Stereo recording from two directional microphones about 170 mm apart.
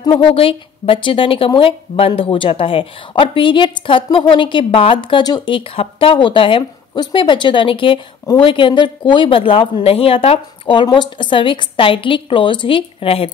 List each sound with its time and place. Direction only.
0.3 s a woman's voice: 30° left (ahead or behind)